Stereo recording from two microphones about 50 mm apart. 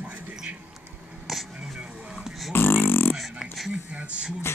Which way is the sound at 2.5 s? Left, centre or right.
Left.